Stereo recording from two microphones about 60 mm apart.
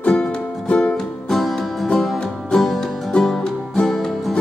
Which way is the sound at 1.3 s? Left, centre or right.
Centre.